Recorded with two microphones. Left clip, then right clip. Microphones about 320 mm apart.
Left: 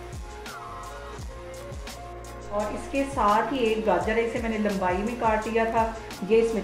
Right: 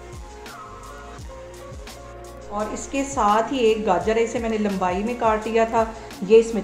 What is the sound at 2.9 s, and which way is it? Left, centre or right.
A woman's voice, right.